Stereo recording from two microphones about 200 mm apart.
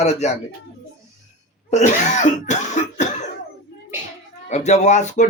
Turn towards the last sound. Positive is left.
turn(degrees=35)  # may be behind; listen again after turning